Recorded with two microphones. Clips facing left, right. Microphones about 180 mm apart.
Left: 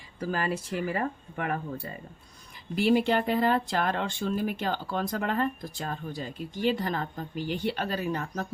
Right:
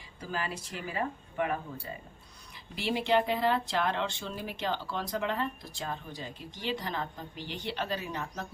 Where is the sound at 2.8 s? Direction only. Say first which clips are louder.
Left 4 dB; 50° left (ahead or behind).